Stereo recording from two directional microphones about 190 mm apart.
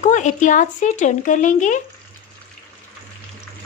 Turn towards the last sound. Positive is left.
turn(degrees=40)  # may be behind; listen again after turning